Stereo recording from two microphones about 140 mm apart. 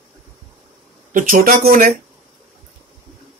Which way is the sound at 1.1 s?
85° right.